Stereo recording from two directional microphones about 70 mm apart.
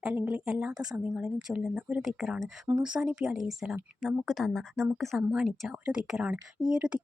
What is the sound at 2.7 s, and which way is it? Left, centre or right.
Speech, centre.